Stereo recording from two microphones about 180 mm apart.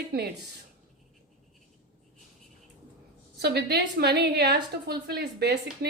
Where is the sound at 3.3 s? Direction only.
65° right (ahead or behind).